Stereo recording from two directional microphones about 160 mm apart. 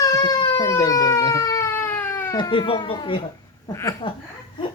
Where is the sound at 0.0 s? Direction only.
25° left (ahead or behind).